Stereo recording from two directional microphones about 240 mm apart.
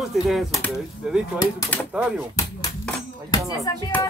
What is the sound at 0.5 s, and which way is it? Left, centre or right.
Music, centre.